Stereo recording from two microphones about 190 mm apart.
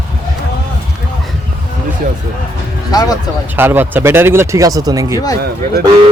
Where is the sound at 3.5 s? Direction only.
10° right (ahead or behind).